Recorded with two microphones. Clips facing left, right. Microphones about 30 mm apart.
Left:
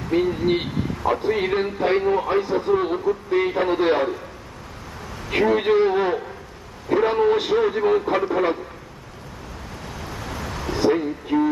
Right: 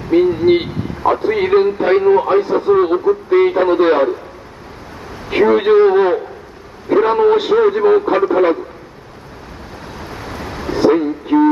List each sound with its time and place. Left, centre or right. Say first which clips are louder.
0.1 s a man's voice: right 9 dB; centre
5.3 s a man's voice: right 7 dB; right
9.9 s vehicle: right 4 dB; right